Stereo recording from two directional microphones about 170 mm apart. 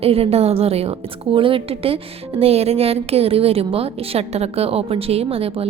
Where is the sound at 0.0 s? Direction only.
35° right (ahead or behind).